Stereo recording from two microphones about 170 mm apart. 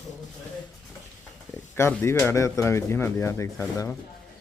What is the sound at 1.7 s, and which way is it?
Speech, 15° left (ahead or behind).